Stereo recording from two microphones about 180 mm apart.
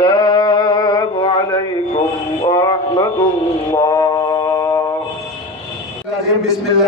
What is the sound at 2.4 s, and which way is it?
Music, 25° left (ahead or behind).